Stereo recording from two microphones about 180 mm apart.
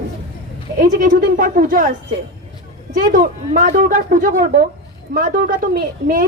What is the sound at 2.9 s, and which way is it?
A woman's voice, 50° right (ahead or behind).